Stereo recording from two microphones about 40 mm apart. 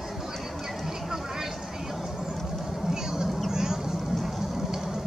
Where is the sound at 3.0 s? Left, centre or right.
Centre.